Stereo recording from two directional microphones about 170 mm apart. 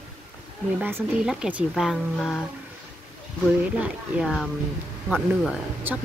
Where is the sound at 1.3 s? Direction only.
5° right (ahead or behind).